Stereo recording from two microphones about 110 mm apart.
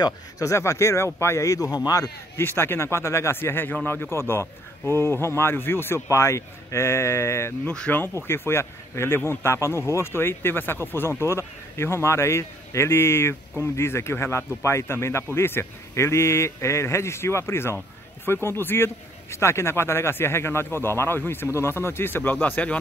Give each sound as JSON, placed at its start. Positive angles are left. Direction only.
{"t": 0.0, "sound": "speech", "side_deg": 30}
{"t": 7.6, "sound": "speech", "side_deg": 10}